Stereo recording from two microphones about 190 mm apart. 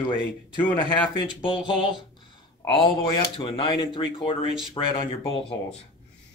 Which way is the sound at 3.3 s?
25° left (ahead or behind).